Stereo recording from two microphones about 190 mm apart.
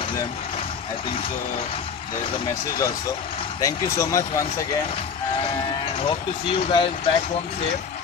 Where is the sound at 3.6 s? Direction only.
15° left (ahead or behind).